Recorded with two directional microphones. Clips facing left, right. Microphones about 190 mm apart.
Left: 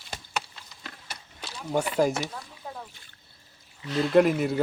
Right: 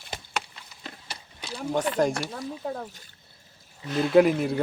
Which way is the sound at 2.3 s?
50° right (ahead or behind).